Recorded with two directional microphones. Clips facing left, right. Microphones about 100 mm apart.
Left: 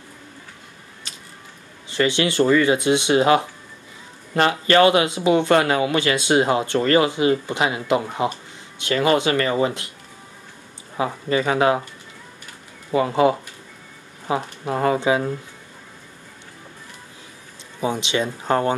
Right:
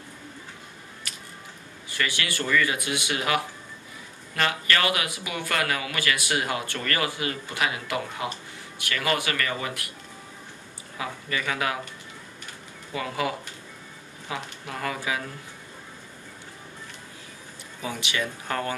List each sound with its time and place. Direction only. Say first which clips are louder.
1.1 s music: even; 25° left (ahead or behind)
1.9 s speech: left 10 dB; 25° left (ahead or behind)
11.0 s speech: left 10 dB; 30° left (ahead or behind)
12.9 s speech: left 11 dB; 30° left (ahead or behind)
17.7 s speech: left 8 dB; 25° left (ahead or behind)